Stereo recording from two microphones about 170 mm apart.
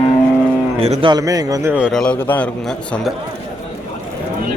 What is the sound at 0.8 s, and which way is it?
A man's voice, 35° right (ahead or behind).